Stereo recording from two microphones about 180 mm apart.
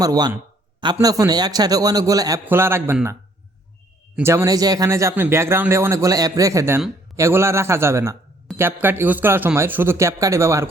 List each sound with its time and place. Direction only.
0.0 s a man's voice: 20° right (ahead or behind)